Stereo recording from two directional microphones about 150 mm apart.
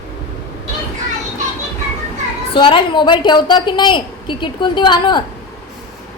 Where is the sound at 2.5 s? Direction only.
35° left (ahead or behind).